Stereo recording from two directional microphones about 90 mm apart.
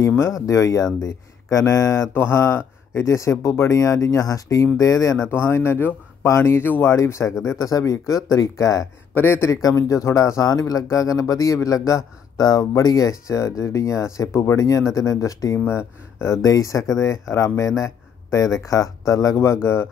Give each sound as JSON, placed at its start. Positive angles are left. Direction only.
{"t": 0.0, "sound": "speech", "side_deg": 30}
{"t": 7.0, "sound": "speech", "side_deg": 35}
{"t": 9.1, "sound": "speech", "side_deg": 25}
{"t": 9.6, "sound": "speech", "side_deg": 40}
{"t": 15.6, "sound": "speech", "side_deg": 25}
{"t": 16.4, "sound": "speech", "side_deg": 40}